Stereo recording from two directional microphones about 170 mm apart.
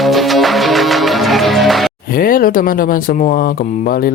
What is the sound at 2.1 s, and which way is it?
Speech, 55° left (ahead or behind).